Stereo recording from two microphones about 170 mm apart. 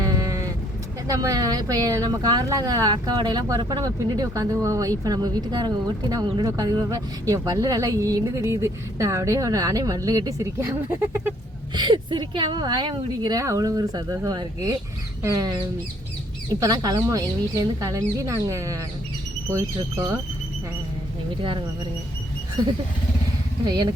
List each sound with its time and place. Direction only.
0.0 s sheep: 20° right (ahead or behind)
1.0 s speech: 20° right (ahead or behind)
11.7 s speech: 25° right (ahead or behind)
16.6 s speech: 20° right (ahead or behind)
22.6 s speech: 25° right (ahead or behind)